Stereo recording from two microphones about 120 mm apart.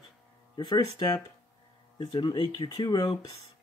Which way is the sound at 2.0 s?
40° left (ahead or behind).